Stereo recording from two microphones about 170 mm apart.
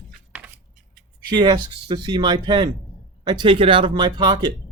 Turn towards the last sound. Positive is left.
turn(degrees=-25)  # may be behind; listen again after turning